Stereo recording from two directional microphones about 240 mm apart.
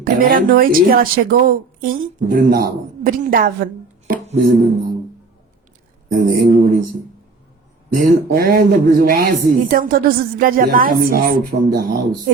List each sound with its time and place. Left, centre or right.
0.0 s speech: right
6.1 s speech: right
7.9 s speech: right